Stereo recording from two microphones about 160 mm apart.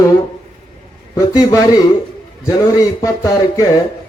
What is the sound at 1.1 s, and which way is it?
A man's voice, 20° left (ahead or behind).